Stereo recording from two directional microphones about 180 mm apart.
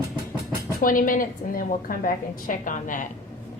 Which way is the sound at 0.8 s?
50° left (ahead or behind).